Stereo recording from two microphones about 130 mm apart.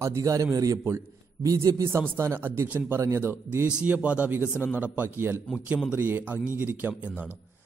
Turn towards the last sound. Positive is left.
turn(degrees=-15)  # may be behind; listen again after turning